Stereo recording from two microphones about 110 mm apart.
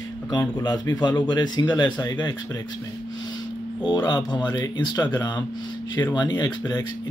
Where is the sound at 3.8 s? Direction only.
40° left (ahead or behind).